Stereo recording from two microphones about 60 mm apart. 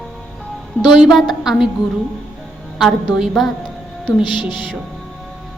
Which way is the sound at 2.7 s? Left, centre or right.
Centre.